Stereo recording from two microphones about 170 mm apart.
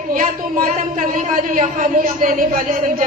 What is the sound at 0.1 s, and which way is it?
A woman's voice, 50° right (ahead or behind).